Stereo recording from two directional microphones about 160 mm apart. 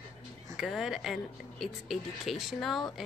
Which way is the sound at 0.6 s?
Centre (ahead or behind).